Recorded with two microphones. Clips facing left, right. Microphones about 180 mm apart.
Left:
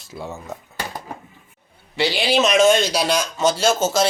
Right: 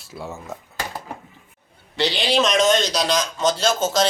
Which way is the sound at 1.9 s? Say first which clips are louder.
Left 1 dB; 5° left (ahead or behind).